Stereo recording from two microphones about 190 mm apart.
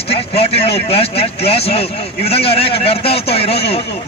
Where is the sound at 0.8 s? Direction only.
30° left (ahead or behind).